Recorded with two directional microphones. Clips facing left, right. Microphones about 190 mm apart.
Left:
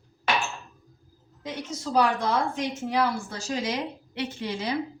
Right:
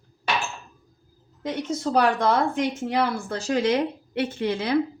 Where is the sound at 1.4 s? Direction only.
60° right (ahead or behind).